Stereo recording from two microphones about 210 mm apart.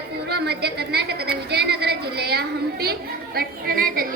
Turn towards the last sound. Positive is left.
turn(degrees=-45)  # may be behind; listen again after turning